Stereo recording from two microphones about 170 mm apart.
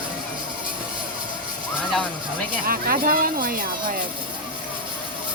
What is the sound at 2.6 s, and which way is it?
Speech, 60° right (ahead or behind).